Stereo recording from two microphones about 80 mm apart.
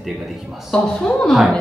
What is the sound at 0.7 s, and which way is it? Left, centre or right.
Speech, centre.